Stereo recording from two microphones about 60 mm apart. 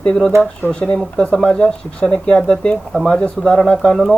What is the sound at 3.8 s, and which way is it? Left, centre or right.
Speech, centre.